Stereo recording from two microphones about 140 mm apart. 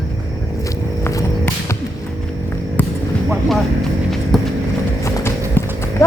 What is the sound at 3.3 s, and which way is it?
Vehicle, centre (ahead or behind).